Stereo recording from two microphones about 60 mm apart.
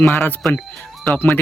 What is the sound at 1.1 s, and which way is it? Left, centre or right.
Speech, left.